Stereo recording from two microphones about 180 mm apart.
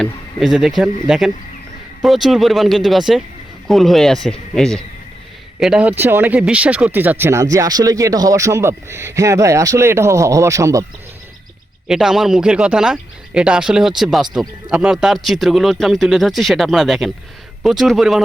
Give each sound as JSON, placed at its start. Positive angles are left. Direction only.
{"t": 0.0, "sound": "speech", "side_deg": 0}
{"t": 11.9, "sound": "speech", "side_deg": 0}